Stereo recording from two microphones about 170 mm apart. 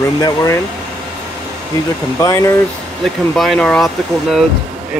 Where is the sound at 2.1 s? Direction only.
15° left (ahead or behind).